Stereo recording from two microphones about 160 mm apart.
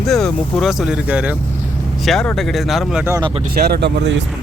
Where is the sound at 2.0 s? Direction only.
5° left (ahead or behind).